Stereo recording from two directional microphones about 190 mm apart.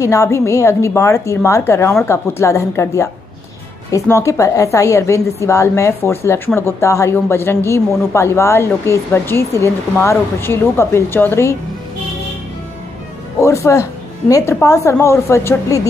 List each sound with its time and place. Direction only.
0.0 s a woman's voice: 15° left (ahead or behind)
13.4 s a woman's voice: 15° left (ahead or behind)